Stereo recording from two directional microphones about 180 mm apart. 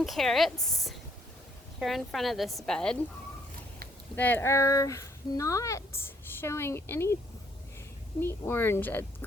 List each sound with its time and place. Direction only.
0.0 s a woman's voice: centre (ahead or behind)
4.1 s speech: 10° left (ahead or behind)
8.2 s speech: 10° left (ahead or behind)